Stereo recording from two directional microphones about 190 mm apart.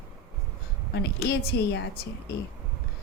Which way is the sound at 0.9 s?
60° left (ahead or behind).